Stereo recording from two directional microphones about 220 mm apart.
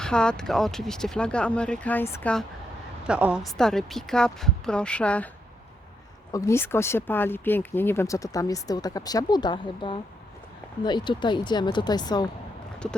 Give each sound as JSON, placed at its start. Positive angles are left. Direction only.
{"t": 0.0, "sound": "speech", "side_deg": 5}
{"t": 3.1, "sound": "speech", "side_deg": -5}
{"t": 6.3, "sound": "speech", "side_deg": 15}